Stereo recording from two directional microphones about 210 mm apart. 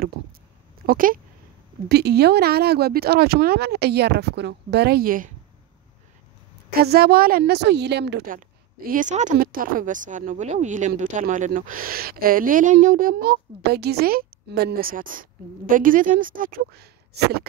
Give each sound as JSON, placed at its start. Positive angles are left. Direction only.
{"t": 0.8, "sound": "a woman's voice", "side_deg": -40}
{"t": 1.9, "sound": "speech", "side_deg": -50}
{"t": 6.7, "sound": "speech", "side_deg": -50}
{"t": 8.4, "sound": "a woman's voice", "side_deg": -40}